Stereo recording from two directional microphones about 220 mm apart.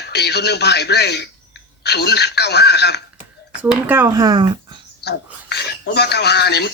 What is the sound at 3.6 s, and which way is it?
Speech, 10° right (ahead or behind).